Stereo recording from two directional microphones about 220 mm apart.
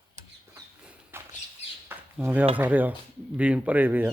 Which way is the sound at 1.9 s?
10° right (ahead or behind).